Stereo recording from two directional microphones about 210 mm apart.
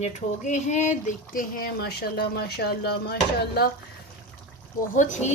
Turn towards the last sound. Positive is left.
turn(degrees=35)  # may be behind; listen again after turning